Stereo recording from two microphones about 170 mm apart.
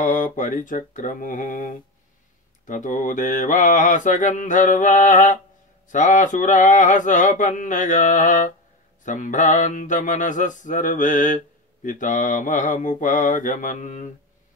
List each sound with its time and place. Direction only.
0.0 s mantra: 50° left (ahead or behind)